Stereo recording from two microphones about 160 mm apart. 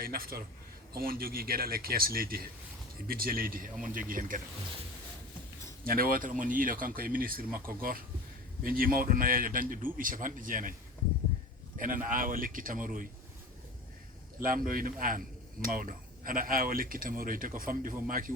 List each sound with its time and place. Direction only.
0.0 s a man's voice: 65° right (ahead or behind)
5.8 s speech: 65° right (ahead or behind)
11.8 s speech: 60° right (ahead or behind)
14.4 s speech: 60° right (ahead or behind)